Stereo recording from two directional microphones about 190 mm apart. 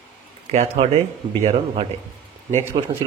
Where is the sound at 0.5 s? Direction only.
35° right (ahead or behind).